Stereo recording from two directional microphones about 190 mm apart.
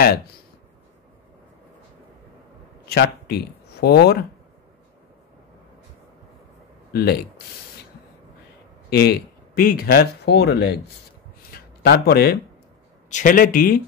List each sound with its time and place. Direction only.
2.9 s speech: 60° left (ahead or behind)
6.9 s speech: 55° left (ahead or behind)
8.9 s speech: 55° left (ahead or behind)
13.1 s a man's voice: 45° left (ahead or behind)